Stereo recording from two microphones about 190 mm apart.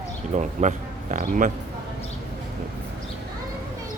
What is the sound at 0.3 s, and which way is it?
A man's voice, 35° right (ahead or behind).